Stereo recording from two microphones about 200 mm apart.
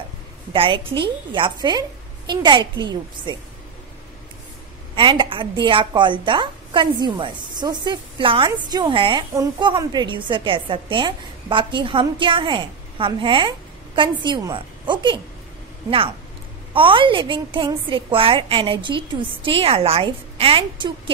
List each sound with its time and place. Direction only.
0.5 s a woman's voice: 25° right (ahead or behind)
4.9 s a woman's voice: 25° right (ahead or behind)
16.7 s a woman's voice: 25° right (ahead or behind)